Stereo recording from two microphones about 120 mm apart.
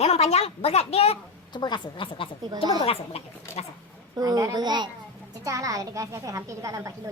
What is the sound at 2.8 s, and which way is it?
Speech, 55° left (ahead or behind).